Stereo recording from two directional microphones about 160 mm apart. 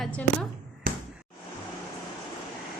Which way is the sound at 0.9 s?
60° right (ahead or behind).